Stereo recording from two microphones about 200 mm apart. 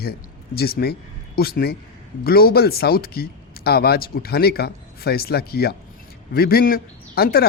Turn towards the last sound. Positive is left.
turn(degrees=50)  # may be behind; listen again after turning